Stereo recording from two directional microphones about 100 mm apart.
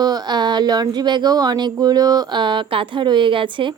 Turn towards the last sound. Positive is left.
turn(degrees=-55)  # may be behind; listen again after turning